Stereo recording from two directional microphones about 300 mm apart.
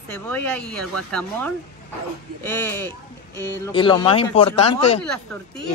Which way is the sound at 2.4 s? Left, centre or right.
Centre.